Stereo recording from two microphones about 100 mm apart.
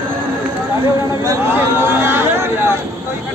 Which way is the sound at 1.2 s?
30° right (ahead or behind).